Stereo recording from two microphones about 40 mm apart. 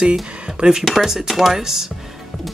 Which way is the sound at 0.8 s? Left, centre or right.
Centre.